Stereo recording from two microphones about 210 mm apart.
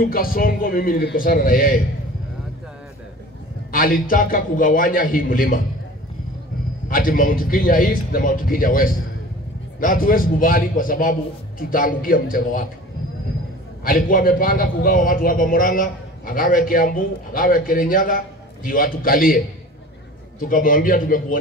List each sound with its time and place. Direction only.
0.0 s a man's voice: 45° left (ahead or behind)
3.7 s a man's voice: 40° left (ahead or behind)
6.9 s a man's voice: 40° left (ahead or behind)
13.8 s a man's voice: 40° left (ahead or behind)